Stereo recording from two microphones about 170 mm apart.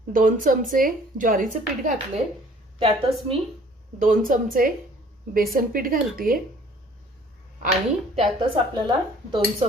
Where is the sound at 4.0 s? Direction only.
50° right (ahead or behind).